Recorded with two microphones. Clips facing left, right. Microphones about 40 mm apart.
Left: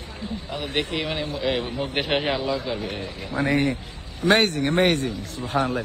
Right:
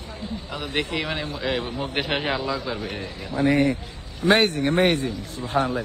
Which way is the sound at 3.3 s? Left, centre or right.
Left.